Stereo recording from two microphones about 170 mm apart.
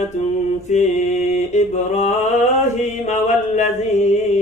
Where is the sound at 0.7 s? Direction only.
45° left (ahead or behind).